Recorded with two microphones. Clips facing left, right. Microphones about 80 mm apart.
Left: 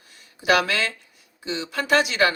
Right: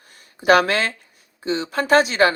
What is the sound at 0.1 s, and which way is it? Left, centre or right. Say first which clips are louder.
Speech: right 5 dB; right.